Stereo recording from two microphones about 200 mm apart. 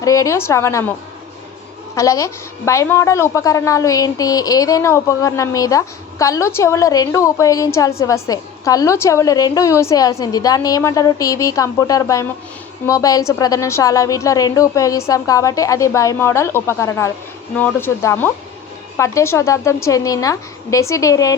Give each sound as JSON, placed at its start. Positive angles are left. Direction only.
{"t": 0.0, "sound": "a woman's voice", "side_deg": 15}
{"t": 2.0, "sound": "a woman's voice", "side_deg": 15}